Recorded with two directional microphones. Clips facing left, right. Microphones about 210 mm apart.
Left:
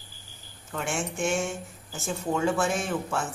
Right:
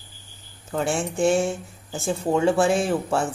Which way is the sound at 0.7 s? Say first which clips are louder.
Right 6 dB; 35° right (ahead or behind).